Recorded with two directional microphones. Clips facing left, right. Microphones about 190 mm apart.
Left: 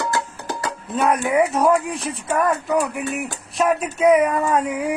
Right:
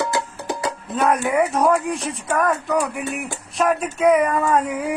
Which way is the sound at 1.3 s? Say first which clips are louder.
Left 3 dB; centre (ahead or behind).